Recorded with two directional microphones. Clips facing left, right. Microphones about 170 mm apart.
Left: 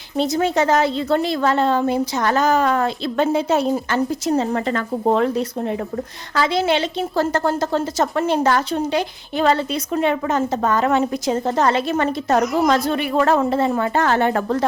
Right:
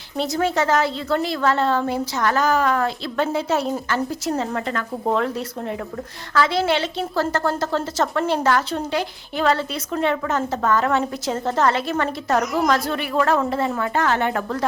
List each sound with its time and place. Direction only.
0.2 s a woman's voice: 20° left (ahead or behind); by 14.6 s 35° left (ahead or behind)